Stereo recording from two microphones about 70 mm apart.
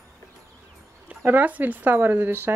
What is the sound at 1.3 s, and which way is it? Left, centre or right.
Speech, right.